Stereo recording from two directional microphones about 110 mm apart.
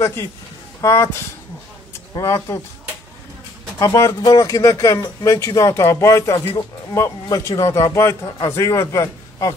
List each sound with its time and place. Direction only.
0.0 s speech: 25° left (ahead or behind)
2.1 s speech: 30° left (ahead or behind)
3.8 s a man's voice: 30° left (ahead or behind)